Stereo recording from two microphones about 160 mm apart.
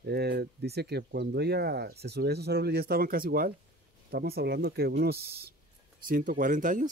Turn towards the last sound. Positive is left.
turn(degrees=-55)  # may be behind; listen again after turning